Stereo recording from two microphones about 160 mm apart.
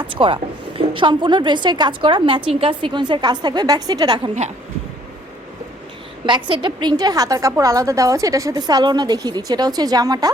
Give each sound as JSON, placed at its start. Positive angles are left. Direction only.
{"t": 0.0, "sound": "a woman's voice", "side_deg": -30}
{"t": 6.2, "sound": "a woman's voice", "side_deg": -30}